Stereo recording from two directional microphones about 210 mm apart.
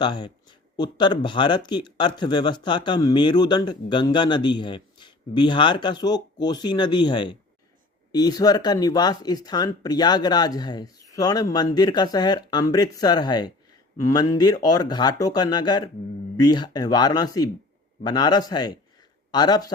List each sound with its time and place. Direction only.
0.0 s speech: 20° left (ahead or behind)